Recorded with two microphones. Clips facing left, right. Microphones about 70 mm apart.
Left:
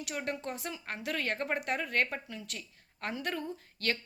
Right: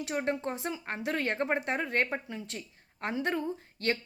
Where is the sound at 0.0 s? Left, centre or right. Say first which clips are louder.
Right 5 dB; right.